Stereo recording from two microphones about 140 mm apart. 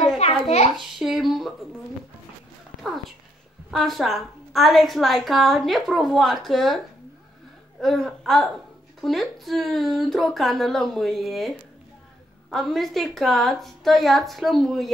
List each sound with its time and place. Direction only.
0.2 s a sound: 50° left (ahead or behind)
0.7 s a woman's voice: centre (ahead or behind)
3.7 s a woman's voice: centre (ahead or behind)
7.8 s a woman's voice: centre (ahead or behind)